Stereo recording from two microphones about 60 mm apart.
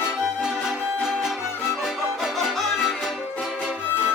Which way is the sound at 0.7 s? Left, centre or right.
Centre.